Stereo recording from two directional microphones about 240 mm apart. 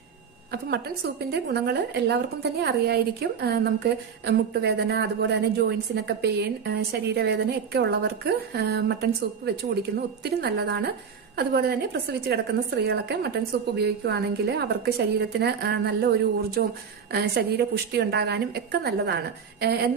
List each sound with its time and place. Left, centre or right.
1.3 s a woman's voice: right